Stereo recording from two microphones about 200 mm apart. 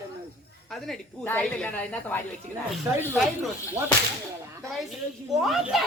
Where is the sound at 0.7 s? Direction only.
5° left (ahead or behind).